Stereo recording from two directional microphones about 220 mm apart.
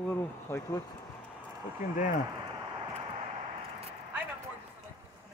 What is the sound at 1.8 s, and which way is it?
Speech, 35° left (ahead or behind).